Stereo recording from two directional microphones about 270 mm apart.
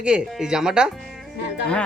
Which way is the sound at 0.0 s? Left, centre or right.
Centre.